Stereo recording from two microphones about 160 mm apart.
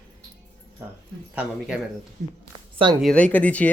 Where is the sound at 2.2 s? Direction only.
50° right (ahead or behind).